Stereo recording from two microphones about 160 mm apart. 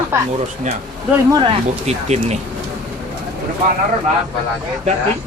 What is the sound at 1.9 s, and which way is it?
Speech, 45° right (ahead or behind).